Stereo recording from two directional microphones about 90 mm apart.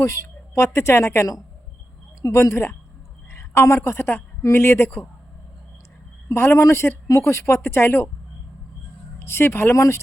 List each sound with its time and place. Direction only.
0.0 s a woman's voice: 35° left (ahead or behind)
6.2 s a woman's voice: 30° left (ahead or behind)
9.1 s speech: 30° left (ahead or behind)